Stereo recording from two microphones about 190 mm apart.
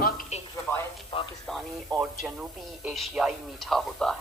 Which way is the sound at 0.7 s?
10° left (ahead or behind).